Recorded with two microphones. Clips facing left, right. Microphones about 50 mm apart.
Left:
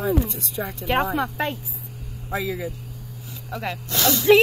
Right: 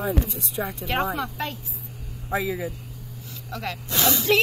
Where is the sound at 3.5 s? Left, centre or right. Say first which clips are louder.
Left 2 dB; centre.